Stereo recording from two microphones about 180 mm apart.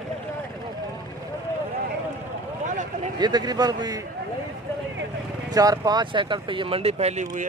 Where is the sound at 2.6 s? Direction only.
45° right (ahead or behind).